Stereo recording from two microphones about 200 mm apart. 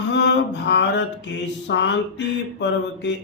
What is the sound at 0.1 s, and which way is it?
Mantra, 60° left (ahead or behind).